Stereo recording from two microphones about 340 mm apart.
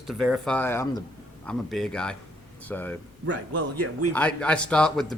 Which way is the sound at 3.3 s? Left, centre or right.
Right.